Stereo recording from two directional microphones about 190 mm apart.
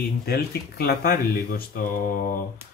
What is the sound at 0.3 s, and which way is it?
Speech, 55° left (ahead or behind).